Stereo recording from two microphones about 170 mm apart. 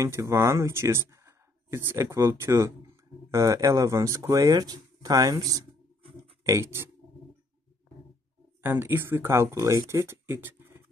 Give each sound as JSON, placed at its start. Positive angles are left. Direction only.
{"t": 0.0, "sound": "speech", "side_deg": -15}
{"t": 8.6, "sound": "speech", "side_deg": -10}